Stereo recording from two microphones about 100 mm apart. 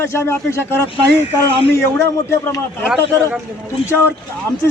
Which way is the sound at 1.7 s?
25° left (ahead or behind).